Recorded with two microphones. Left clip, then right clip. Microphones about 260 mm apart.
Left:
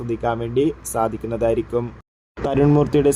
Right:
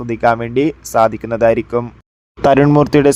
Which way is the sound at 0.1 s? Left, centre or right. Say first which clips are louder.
Right 9 dB; right.